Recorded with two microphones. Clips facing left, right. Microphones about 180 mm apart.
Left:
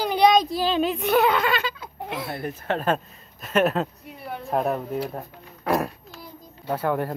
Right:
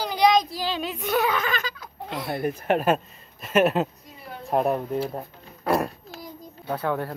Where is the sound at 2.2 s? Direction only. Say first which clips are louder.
Right 6 dB; 20° right (ahead or behind).